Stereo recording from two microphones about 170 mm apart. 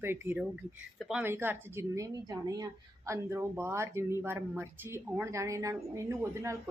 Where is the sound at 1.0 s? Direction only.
Centre (ahead or behind).